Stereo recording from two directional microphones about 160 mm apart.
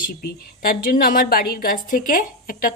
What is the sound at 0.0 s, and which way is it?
A woman's voice, 65° left (ahead or behind).